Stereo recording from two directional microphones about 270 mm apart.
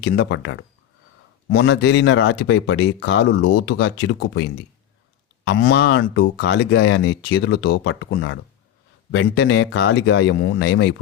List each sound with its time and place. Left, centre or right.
0.0 s speech: left
5.5 s speech: left